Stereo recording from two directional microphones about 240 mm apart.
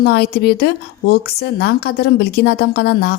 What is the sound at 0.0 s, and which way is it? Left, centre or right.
Speech, left.